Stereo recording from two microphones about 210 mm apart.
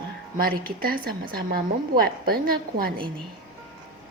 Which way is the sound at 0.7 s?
45° right (ahead or behind).